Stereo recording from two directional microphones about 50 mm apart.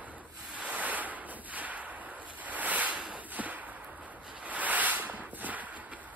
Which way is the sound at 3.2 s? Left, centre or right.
Right.